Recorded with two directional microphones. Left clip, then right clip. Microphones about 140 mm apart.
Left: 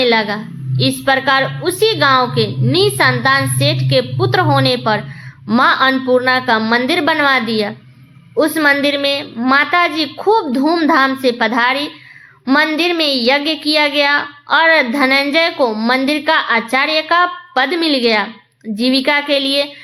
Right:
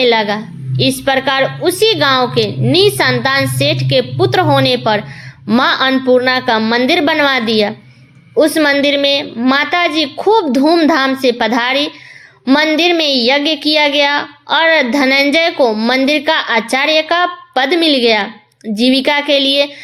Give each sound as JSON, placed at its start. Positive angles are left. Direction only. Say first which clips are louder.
{"t": 0.0, "sound": "a child's voice", "louder": "right 2 dB", "side_deg": -35}